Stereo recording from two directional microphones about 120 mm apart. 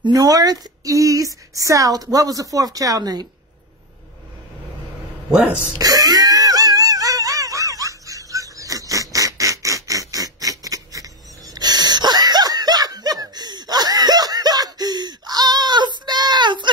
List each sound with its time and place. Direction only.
0.0 s speech: 30° right (ahead or behind)
5.7 s wheeze: 30° right (ahead or behind)